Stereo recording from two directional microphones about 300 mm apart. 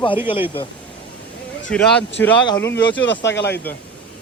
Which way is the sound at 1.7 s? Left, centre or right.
Centre.